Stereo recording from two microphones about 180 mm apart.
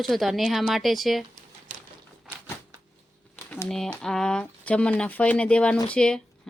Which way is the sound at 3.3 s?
15° left (ahead or behind).